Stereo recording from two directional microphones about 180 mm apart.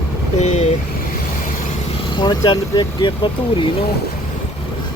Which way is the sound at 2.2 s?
25° left (ahead or behind).